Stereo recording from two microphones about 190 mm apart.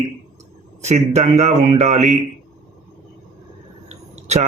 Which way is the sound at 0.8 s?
35° right (ahead or behind).